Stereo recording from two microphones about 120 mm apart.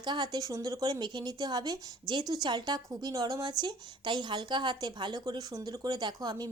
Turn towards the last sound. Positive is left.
turn(degrees=-30)  # may be behind; listen again after turning